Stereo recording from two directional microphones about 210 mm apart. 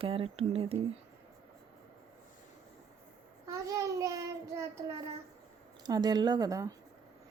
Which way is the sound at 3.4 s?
15° right (ahead or behind).